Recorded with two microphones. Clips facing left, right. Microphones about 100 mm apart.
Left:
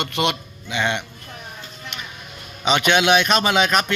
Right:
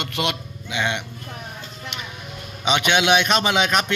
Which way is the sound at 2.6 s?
15° right (ahead or behind).